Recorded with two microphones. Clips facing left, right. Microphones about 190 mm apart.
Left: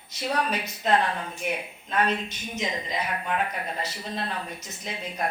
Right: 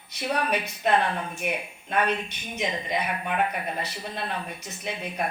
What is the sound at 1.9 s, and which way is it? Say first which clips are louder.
A woman's voice: even; 60° right (ahead or behind).